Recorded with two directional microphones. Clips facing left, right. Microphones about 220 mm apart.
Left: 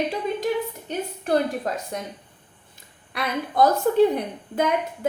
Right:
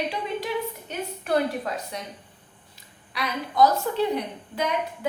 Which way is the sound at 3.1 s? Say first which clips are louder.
Left 1 dB; 50° left (ahead or behind).